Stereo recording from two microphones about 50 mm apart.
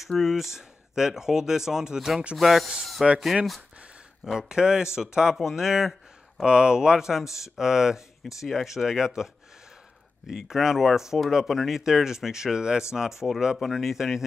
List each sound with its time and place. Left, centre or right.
0.2 s speech: centre
7.2 s speech: left
7.5 s speech: centre